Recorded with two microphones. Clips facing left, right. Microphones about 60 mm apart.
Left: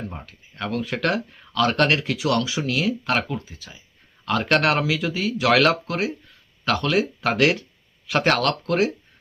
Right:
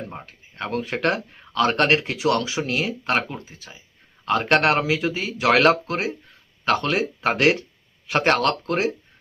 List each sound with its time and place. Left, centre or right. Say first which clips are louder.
0.3 s speech: right 1 dB; right